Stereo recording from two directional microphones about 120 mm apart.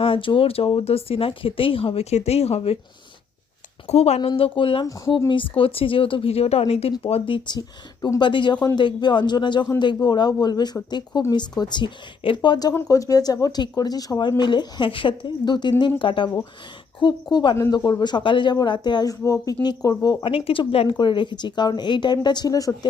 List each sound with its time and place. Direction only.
0.0 s speech: 45° left (ahead or behind)
3.8 s speech: 60° left (ahead or behind)
7.0 s speech: 45° left (ahead or behind); by 20.3 s 30° left (ahead or behind)
20.3 s speech: 50° left (ahead or behind); by 22.9 s 30° left (ahead or behind)